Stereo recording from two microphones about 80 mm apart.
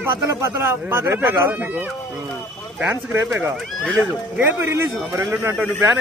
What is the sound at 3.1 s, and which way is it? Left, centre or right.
Speech, right.